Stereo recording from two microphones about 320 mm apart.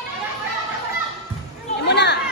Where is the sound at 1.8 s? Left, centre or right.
Left.